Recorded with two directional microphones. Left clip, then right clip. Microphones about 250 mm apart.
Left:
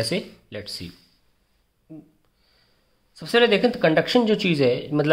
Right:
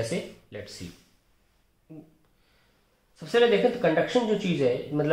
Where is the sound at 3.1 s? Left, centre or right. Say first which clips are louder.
Left 3 dB; left.